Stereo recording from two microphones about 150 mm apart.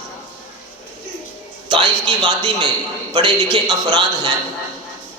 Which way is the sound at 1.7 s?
30° right (ahead or behind).